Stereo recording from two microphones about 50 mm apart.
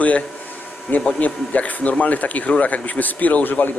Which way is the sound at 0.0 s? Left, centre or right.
Left.